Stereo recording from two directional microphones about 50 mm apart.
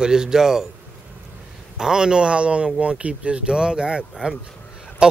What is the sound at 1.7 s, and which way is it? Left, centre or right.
Speech, centre.